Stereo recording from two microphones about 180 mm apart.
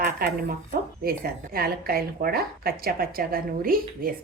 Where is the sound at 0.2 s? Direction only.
60° right (ahead or behind).